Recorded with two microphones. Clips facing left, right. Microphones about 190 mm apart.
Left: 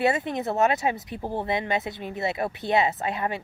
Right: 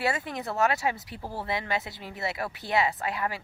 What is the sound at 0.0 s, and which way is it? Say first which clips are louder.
Speech: left 6 dB; 20° left (ahead or behind).